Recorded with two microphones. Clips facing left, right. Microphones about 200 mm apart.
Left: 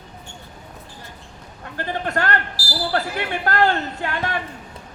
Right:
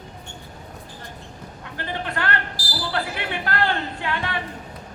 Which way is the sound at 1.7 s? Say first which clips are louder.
Left 5 dB; 45° left (ahead or behind).